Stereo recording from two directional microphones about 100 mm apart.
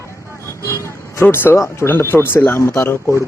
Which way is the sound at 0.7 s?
30° left (ahead or behind).